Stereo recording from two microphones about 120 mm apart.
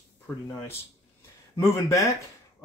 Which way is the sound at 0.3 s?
15° left (ahead or behind).